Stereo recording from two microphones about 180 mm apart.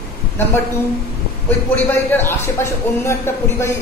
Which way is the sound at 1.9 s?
10° left (ahead or behind).